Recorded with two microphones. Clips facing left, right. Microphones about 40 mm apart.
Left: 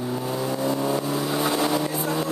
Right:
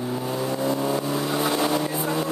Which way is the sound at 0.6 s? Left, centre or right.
Centre.